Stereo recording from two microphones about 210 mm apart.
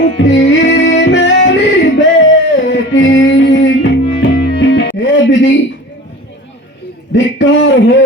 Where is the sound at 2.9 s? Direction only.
65° left (ahead or behind).